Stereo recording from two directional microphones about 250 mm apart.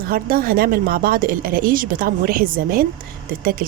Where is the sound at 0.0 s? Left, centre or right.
Right.